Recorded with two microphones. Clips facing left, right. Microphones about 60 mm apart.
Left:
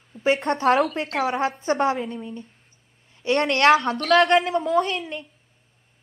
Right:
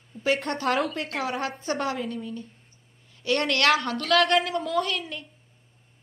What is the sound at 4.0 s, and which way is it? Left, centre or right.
Speech, centre.